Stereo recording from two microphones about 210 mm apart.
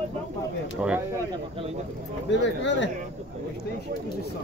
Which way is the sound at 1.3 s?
25° right (ahead or behind).